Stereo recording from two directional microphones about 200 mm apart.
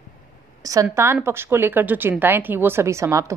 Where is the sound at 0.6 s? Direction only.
15° right (ahead or behind).